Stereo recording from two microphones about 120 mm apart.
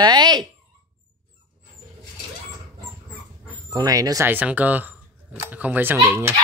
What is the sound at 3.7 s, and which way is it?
Speech, 30° right (ahead or behind).